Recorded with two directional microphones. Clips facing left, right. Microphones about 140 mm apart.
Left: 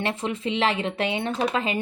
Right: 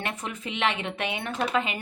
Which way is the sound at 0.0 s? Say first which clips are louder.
Left 7 dB; 30° left (ahead or behind).